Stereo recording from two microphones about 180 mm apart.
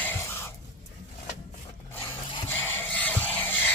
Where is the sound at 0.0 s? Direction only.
15° left (ahead or behind).